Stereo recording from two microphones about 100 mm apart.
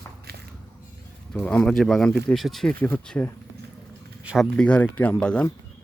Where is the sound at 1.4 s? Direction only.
10° left (ahead or behind).